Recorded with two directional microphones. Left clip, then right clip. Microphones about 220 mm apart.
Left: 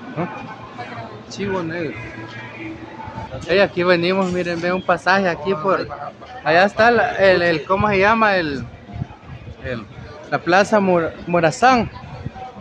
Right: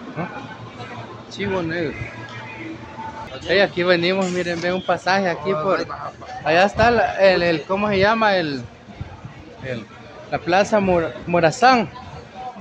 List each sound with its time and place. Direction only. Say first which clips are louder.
0.2 s speech: left 4 dB; 15° left (ahead or behind)
1.3 s speech: even; 5° right (ahead or behind)
3.4 s speech: left 1 dB; 5° left (ahead or behind)
10.3 s speech: left 2 dB; 5° left (ahead or behind)